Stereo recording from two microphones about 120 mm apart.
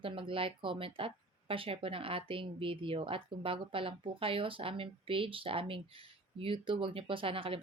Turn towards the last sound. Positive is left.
turn(degrees=-50)  # may be behind; listen again after turning